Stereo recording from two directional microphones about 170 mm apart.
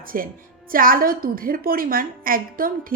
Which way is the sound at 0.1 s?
55° right (ahead or behind).